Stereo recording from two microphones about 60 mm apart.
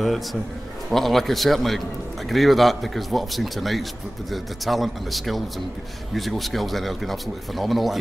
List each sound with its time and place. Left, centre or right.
0.0 s speech: centre